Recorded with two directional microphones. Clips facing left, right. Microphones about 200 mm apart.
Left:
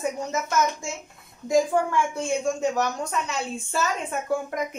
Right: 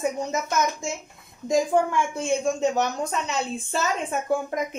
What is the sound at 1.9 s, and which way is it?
A woman's voice, 20° right (ahead or behind).